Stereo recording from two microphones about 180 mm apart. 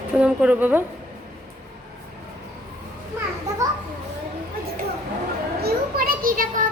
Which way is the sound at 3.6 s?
20° right (ahead or behind).